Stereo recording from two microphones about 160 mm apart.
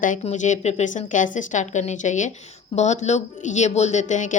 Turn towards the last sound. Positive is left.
turn(degrees=50)  # may be behind; listen again after turning